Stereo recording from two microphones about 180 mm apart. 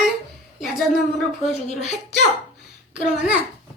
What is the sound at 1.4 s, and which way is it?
Speech, 35° left (ahead or behind).